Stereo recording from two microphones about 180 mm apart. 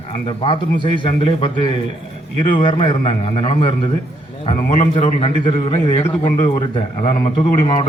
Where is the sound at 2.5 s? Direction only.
30° left (ahead or behind).